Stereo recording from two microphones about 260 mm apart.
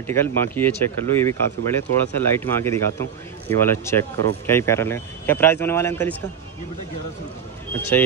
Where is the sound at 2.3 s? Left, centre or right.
Centre.